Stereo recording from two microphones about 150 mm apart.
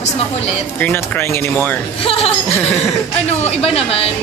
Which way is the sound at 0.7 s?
10° left (ahead or behind).